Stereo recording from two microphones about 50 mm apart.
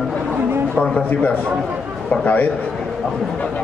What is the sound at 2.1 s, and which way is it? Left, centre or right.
Speech, left.